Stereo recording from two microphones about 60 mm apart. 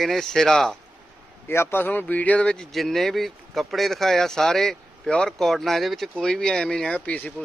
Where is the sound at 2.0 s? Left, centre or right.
Left.